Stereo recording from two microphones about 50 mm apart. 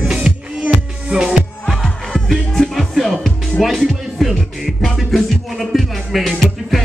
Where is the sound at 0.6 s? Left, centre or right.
Right.